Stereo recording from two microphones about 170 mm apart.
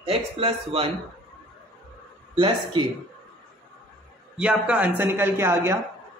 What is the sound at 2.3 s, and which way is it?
Speech, 30° right (ahead or behind).